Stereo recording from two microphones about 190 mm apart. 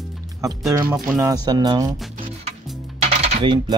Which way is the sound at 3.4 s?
25° right (ahead or behind).